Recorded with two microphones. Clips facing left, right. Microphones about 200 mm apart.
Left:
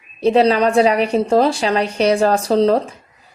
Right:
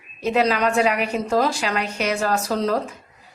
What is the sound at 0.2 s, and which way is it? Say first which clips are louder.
A woman's voice: left 7 dB; 35° left (ahead or behind).